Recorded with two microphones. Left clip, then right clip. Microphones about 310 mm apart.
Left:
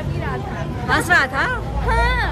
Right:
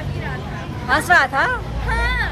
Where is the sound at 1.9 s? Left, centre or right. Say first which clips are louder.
Left 2 dB; centre.